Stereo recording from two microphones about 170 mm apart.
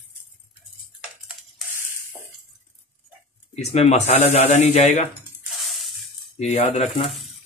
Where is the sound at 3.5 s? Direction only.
40° left (ahead or behind).